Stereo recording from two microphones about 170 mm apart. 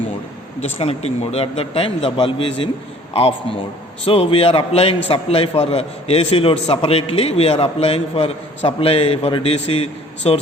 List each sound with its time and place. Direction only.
0.6 s a man's voice: 35° left (ahead or behind)